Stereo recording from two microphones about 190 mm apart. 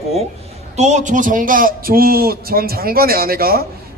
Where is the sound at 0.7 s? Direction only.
40° right (ahead or behind).